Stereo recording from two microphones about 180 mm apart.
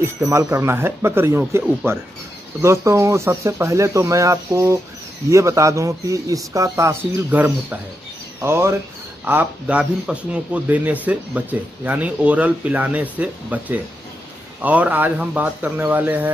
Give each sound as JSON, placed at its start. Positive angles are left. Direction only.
{"t": 0.0, "sound": "speech", "side_deg": -15}
{"t": 2.6, "sound": "speech", "side_deg": -15}